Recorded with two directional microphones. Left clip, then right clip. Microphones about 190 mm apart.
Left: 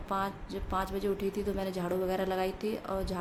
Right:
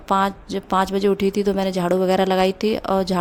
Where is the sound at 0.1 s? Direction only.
50° right (ahead or behind).